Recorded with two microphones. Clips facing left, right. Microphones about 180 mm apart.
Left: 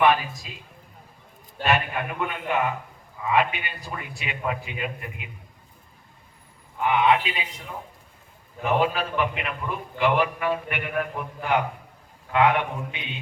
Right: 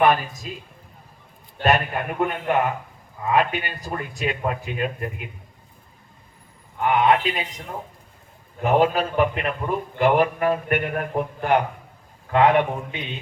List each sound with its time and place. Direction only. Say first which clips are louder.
0.0 s a man's voice: right 2 dB; 45° right (ahead or behind)
1.6 s a man's voice: right 3 dB; 40° right (ahead or behind)
6.8 s a man's voice: right 2 dB; 45° right (ahead or behind)
8.6 s a man's voice: right 4 dB; 40° right (ahead or behind)